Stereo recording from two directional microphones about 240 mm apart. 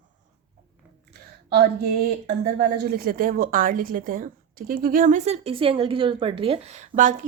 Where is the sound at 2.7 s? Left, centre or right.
Right.